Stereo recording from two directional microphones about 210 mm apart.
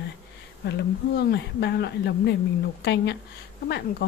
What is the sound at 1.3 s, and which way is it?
A woman's voice, 55° left (ahead or behind).